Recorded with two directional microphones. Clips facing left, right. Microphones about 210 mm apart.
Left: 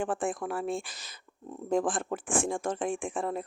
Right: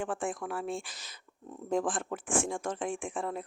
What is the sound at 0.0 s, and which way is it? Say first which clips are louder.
Speech: left 3 dB; 35° left (ahead or behind).